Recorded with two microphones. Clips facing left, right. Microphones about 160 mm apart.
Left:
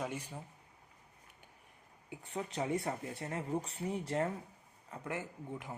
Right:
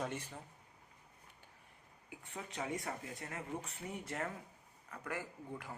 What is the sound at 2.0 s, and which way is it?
Speech, 35° left (ahead or behind).